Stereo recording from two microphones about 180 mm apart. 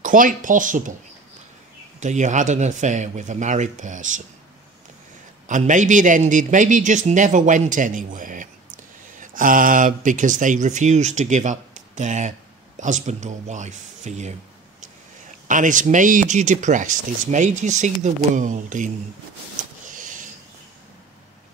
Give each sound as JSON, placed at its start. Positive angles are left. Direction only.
{"t": 0.0, "sound": "a man's voice", "side_deg": -45}
{"t": 2.0, "sound": "a man's voice", "side_deg": -40}
{"t": 5.5, "sound": "a man's voice", "side_deg": -45}
{"t": 15.4, "sound": "a man's voice", "side_deg": -45}
{"t": 19.9, "sound": "a sound", "side_deg": -45}